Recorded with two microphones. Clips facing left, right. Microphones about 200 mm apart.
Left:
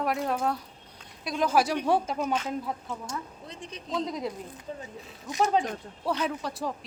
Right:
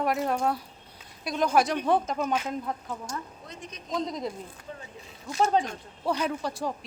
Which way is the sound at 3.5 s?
30° left (ahead or behind).